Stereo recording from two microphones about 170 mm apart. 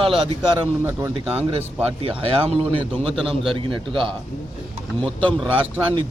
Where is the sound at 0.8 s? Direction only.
15° right (ahead or behind).